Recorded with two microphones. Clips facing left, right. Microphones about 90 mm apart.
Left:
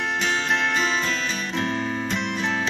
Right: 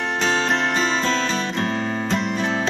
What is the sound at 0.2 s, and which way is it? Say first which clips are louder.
Music: right 4 dB; 35° right (ahead or behind).